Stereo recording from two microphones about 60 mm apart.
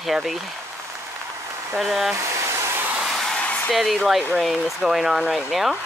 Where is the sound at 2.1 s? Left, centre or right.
Right.